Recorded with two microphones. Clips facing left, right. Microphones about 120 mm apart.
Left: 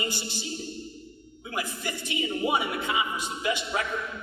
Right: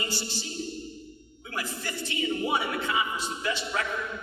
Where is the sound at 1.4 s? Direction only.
15° left (ahead or behind).